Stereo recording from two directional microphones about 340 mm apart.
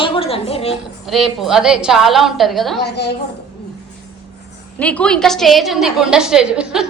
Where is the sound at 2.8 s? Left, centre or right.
Left.